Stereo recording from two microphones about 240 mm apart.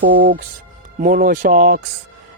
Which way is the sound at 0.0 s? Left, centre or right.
Right.